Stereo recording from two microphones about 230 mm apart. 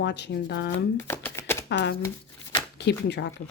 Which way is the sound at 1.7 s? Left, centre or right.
Left.